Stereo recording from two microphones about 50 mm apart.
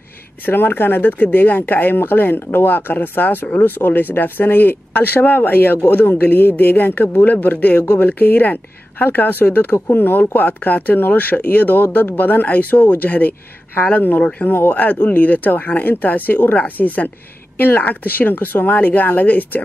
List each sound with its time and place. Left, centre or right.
0.5 s speech: left